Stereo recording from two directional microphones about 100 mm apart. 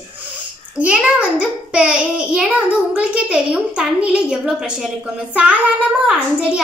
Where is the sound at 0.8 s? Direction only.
10° right (ahead or behind).